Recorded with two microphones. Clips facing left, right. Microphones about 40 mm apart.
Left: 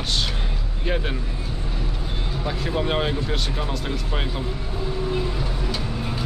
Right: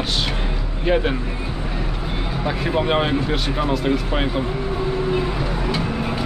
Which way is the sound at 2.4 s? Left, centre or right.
Centre.